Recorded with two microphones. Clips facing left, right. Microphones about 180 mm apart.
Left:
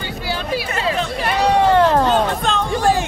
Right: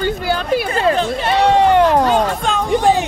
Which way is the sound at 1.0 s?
25° right (ahead or behind).